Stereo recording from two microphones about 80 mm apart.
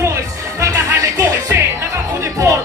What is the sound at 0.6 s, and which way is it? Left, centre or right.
Music, right.